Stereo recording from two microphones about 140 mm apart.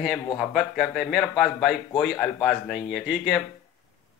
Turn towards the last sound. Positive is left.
turn(degrees=-5)  # may be behind; listen again after turning